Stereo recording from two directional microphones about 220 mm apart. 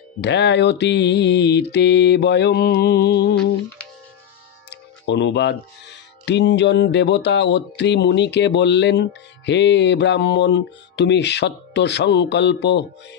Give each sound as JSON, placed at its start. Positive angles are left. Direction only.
{"t": 0.2, "sound": "speech", "side_deg": 50}
{"t": 4.6, "sound": "speech", "side_deg": 55}